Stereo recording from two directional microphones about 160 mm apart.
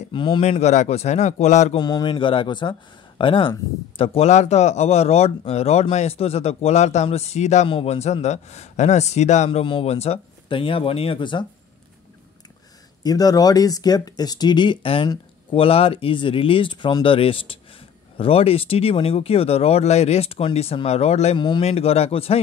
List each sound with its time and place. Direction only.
0.1 s speech: 30° left (ahead or behind)
0.4 s a man's voice: 45° left (ahead or behind)
1.8 s a man's voice: 25° left (ahead or behind)
13.0 s speech: 25° left (ahead or behind); by 21.4 s 40° left (ahead or behind)
21.4 s a man's voice: 30° left (ahead or behind)
21.6 s speech: 40° left (ahead or behind)